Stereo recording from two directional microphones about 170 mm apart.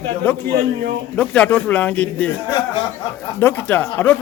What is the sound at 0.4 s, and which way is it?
Speech, 65° right (ahead or behind).